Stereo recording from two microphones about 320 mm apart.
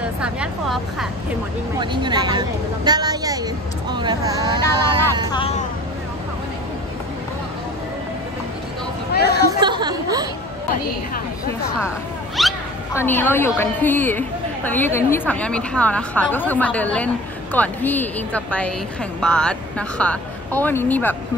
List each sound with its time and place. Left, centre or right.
0.0 s a woman's voice: centre
1.8 s speech: centre
4.6 s speech: centre
9.1 s speech: left
9.6 s a sound: centre
12.4 s a woman's voice: centre